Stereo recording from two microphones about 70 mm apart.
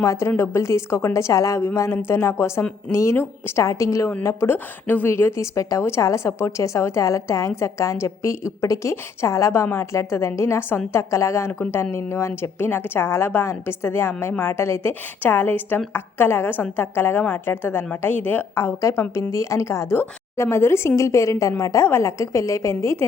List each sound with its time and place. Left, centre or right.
0.0 s a woman's voice: left
1.6 s a woman's voice: left
4.5 s a woman's voice: left
5.5 s a woman's voice: left
11.1 s a woman's voice: left
15.2 s a woman's voice: left